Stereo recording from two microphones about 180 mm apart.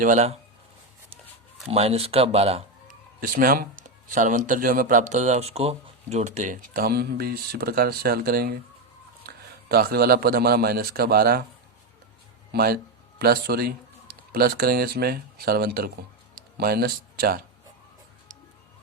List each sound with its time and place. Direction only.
0.0 s speech: 40° right (ahead or behind)
1.7 s speech: 35° right (ahead or behind)
3.2 s a man's voice: 50° right (ahead or behind)
12.5 s a man's voice: 60° right (ahead or behind)
16.3 s a sound: 60° right (ahead or behind)